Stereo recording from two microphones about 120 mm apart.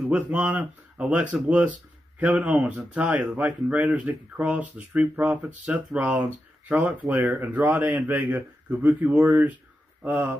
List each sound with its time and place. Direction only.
0.1 s speech: 10° right (ahead or behind)